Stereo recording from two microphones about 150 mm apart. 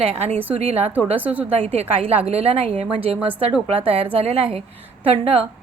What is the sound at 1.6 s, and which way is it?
A woman's voice, 40° right (ahead or behind).